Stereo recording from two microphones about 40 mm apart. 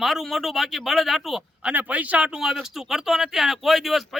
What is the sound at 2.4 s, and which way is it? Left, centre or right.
Speech, centre.